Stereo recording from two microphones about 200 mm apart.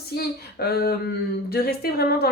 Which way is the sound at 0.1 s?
50° left (ahead or behind).